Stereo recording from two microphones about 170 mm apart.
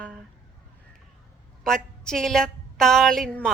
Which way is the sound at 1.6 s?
5° left (ahead or behind).